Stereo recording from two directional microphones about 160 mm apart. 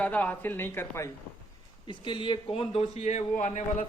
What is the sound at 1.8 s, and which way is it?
Speech, 30° left (ahead or behind).